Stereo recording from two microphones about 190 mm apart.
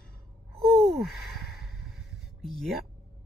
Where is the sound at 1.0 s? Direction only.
Centre (ahead or behind).